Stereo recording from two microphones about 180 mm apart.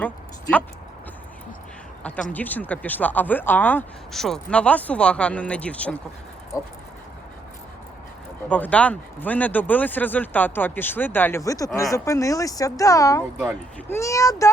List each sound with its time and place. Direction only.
2.3 s speech: 10° left (ahead or behind)
8.4 s speech: 10° left (ahead or behind)
13.4 s speech: centre (ahead or behind)
13.9 s speech: 15° left (ahead or behind)